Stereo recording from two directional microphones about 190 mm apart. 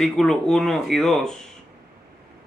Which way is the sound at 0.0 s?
Centre (ahead or behind).